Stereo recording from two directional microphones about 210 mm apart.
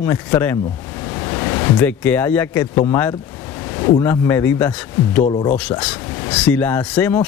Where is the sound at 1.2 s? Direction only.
15° left (ahead or behind).